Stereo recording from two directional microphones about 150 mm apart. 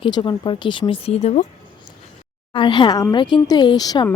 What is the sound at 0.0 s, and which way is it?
Speech, 30° left (ahead or behind).